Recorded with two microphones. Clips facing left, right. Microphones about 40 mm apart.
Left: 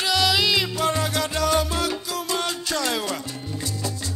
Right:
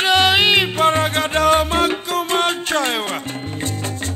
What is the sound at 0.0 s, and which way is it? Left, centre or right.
Music, right.